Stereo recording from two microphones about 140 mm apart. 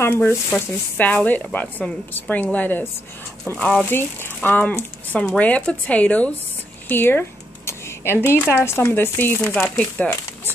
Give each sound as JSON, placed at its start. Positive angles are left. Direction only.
{"t": 0.0, "sound": "speech", "side_deg": 15}